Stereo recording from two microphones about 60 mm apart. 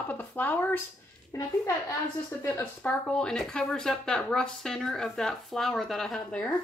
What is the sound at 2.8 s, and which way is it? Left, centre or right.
Speech, centre.